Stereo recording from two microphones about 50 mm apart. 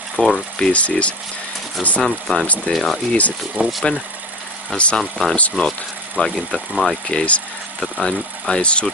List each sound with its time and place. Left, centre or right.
0.2 s speech: centre
0.7 s speech: left
2.0 s speech: centre
3.1 s speech: left
3.6 s speech: right
4.7 s speech: centre
7.1 s speech: left